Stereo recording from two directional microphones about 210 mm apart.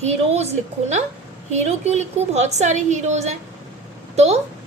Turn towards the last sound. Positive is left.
turn(degrees=-30)  # may be behind; listen again after turning